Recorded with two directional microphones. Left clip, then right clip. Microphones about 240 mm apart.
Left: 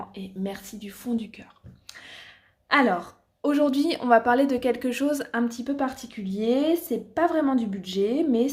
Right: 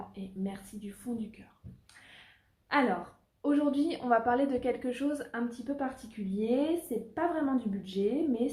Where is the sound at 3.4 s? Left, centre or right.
Left.